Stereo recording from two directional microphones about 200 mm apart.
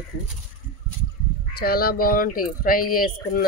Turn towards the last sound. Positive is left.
turn(degrees=45)  # may be behind; listen again after turning